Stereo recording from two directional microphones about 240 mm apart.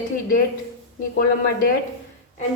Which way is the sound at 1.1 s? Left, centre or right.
Left.